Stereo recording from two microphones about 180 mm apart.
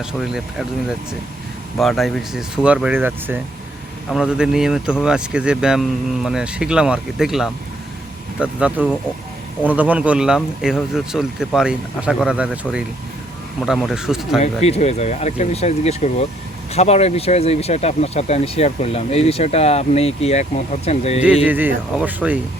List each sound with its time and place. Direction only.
0.0 s speech: 5° right (ahead or behind)
1.8 s speech: centre (ahead or behind)
13.7 s speech: centre (ahead or behind)
14.3 s speech: 35° left (ahead or behind)
21.4 s speech: 10° right (ahead or behind)